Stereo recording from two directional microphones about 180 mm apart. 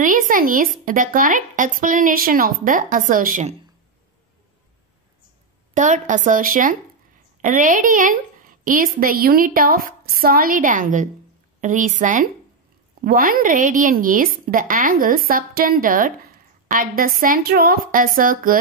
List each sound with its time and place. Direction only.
0.0 s a woman's voice: 50° right (ahead or behind)
5.8 s a woman's voice: 45° right (ahead or behind)